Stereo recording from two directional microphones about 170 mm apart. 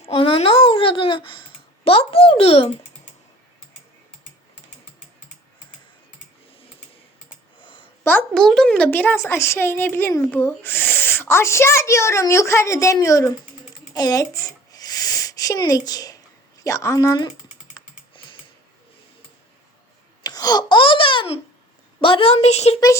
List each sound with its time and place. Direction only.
0.0 s speech: 30° left (ahead or behind)
8.0 s speech: 5° left (ahead or behind)
13.9 s a sound: 20° left (ahead or behind)
16.6 s a woman's voice: 15° left (ahead or behind)
17.7 s typing: 30° left (ahead or behind)
20.2 s babbling: 20° left (ahead or behind)
22.0 s a woman's voice: 35° left (ahead or behind)